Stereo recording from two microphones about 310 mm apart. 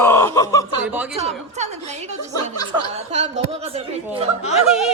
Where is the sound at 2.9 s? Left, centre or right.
Right.